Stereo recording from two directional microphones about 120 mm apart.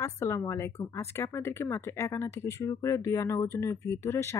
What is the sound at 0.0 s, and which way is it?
Speech, 20° left (ahead or behind).